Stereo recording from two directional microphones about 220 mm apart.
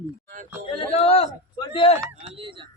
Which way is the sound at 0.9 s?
25° left (ahead or behind).